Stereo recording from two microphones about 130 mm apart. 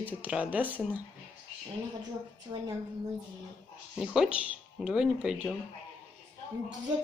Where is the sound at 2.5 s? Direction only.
25° right (ahead or behind).